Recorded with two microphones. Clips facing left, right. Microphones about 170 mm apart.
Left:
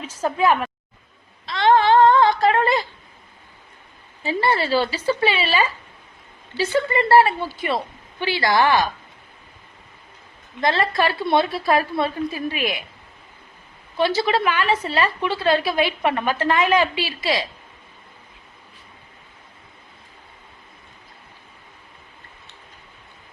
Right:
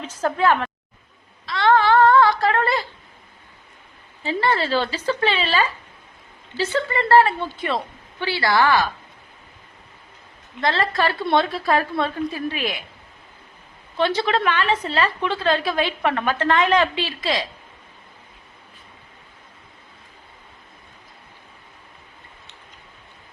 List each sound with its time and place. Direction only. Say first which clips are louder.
0.0 s a woman's voice: even; 10° left (ahead or behind)
1.5 s a sound: left 1 dB; 20° left (ahead or behind)
4.2 s a woman's voice: left 1 dB; 10° left (ahead or behind)
10.6 s a woman's voice: left 1 dB; 15° left (ahead or behind)
13.9 s a woman's voice: left 1 dB; 5° left (ahead or behind)